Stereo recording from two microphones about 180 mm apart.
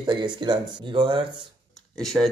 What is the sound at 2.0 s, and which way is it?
Speech, centre (ahead or behind).